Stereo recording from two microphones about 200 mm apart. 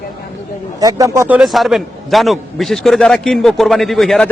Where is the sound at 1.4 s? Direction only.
Centre (ahead or behind).